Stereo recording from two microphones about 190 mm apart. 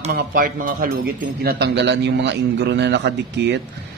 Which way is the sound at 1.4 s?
60° right (ahead or behind).